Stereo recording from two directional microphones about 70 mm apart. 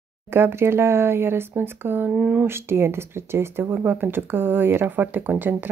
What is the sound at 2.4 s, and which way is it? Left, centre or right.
Speech, right.